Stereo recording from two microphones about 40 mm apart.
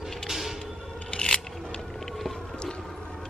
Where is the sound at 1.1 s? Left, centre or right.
Left.